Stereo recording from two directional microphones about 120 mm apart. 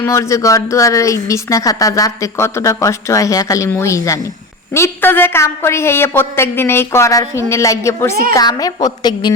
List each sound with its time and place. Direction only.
0.0 s a woman's voice: 25° left (ahead or behind)